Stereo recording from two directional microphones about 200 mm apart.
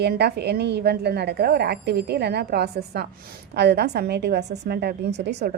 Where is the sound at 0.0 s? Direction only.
55° right (ahead or behind).